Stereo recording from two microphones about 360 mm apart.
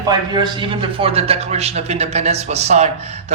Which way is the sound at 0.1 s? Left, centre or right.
Centre.